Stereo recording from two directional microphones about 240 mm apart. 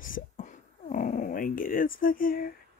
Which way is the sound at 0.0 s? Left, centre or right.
Left.